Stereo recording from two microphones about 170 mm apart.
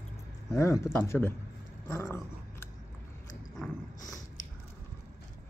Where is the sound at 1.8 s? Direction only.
15° left (ahead or behind).